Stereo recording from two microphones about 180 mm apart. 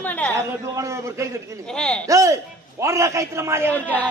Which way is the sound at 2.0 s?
15° right (ahead or behind).